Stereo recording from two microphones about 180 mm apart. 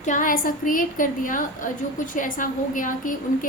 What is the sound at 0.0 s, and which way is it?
A woman's voice, 45° left (ahead or behind).